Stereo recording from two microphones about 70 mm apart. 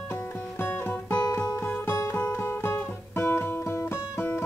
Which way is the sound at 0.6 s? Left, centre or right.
Left.